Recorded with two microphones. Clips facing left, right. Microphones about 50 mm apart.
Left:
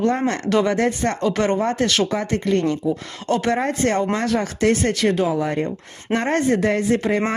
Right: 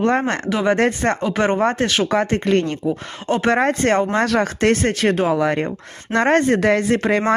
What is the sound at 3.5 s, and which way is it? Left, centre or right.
Speech, right.